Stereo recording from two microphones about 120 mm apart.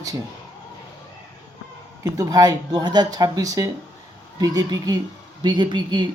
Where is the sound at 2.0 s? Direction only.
30° right (ahead or behind).